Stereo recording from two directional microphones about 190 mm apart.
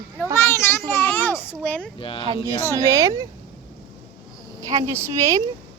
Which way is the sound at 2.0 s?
30° left (ahead or behind).